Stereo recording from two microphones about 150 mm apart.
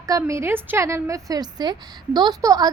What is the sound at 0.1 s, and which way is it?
A child's voice, 20° right (ahead or behind).